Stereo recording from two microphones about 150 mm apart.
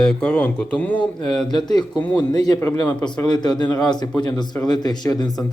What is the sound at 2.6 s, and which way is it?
Speech, 15° left (ahead or behind).